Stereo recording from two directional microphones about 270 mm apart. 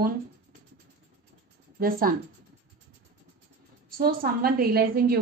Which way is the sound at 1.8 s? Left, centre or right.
Right.